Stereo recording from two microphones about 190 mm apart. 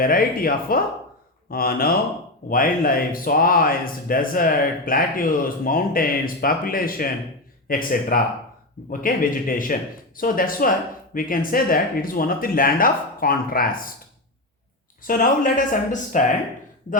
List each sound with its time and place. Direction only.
0.0 s speech: 50° left (ahead or behind)
15.0 s speech: 45° left (ahead or behind)